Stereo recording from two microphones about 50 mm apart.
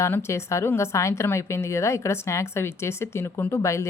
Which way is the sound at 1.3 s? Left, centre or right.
Left.